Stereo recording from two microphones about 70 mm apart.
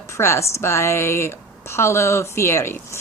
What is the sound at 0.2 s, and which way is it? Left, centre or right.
A woman's voice, left.